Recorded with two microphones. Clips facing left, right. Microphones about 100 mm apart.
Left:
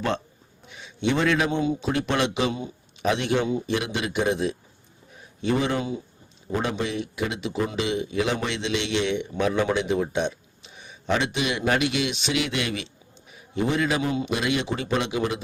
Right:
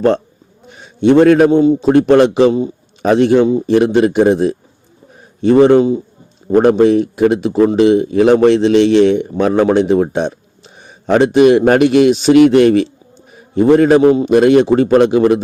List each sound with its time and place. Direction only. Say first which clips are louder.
0.7 s a man's voice: right 15 dB; 45° right (ahead or behind)
6.5 s a man's voice: right 18 dB; 55° right (ahead or behind)